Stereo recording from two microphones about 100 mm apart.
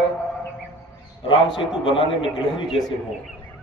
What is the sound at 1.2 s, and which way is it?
A man's voice, 55° left (ahead or behind).